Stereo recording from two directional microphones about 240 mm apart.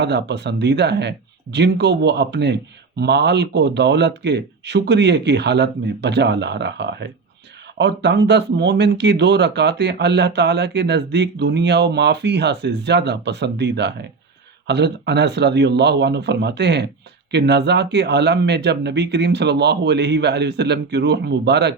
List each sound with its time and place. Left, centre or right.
0.0 s speech: right